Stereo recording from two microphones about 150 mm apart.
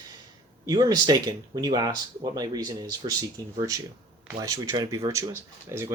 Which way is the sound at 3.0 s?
40° right (ahead or behind).